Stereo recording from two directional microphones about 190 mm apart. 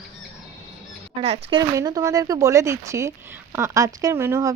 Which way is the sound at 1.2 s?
30° right (ahead or behind).